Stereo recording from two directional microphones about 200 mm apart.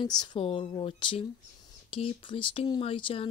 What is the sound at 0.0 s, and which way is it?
Speech, 20° left (ahead or behind).